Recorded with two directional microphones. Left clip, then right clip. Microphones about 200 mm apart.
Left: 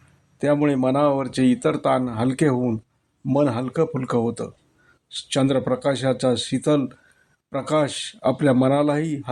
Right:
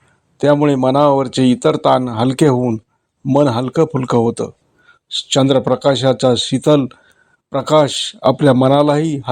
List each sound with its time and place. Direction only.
0.3 s speech: 25° right (ahead or behind)